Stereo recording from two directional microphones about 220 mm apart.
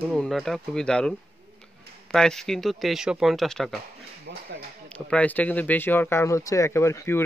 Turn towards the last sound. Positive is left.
turn(degrees=10)  # may be behind; listen again after turning